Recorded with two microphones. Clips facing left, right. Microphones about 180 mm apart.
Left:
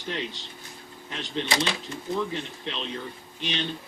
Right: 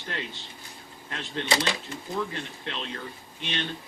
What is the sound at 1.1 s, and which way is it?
Speech, centre (ahead or behind).